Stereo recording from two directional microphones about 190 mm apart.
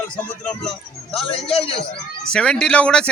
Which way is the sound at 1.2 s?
30° left (ahead or behind).